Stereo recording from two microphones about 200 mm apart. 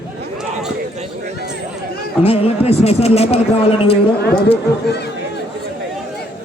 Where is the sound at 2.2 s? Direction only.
30° left (ahead or behind).